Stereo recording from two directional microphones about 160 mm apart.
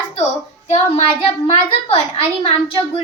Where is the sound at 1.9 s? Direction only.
40° left (ahead or behind).